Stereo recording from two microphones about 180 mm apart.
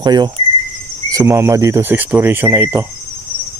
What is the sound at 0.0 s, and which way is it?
Frog, 25° right (ahead or behind).